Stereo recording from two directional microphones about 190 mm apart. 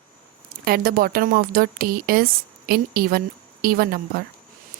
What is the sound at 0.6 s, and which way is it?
Speech, 50° right (ahead or behind).